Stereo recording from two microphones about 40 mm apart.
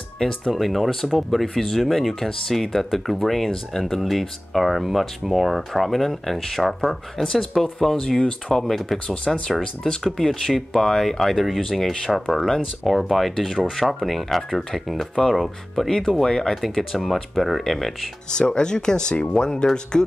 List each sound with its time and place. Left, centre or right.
0.2 s speech: centre
9.0 s speech: left
10.1 s speech: centre
12.8 s speech: centre
18.5 s speech: left